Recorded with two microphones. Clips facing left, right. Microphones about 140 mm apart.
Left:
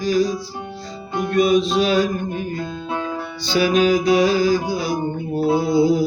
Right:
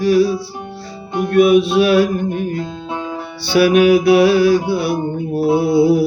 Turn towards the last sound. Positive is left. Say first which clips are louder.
# right 4 dB
turn(degrees=-65)  # may be behind; listen again after turning